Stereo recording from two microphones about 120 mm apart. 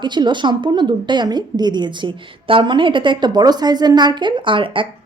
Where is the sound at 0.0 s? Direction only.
40° right (ahead or behind).